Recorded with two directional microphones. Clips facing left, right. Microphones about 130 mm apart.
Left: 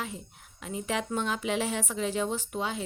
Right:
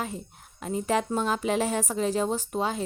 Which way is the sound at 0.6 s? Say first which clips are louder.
Right 6 dB; 40° right (ahead or behind).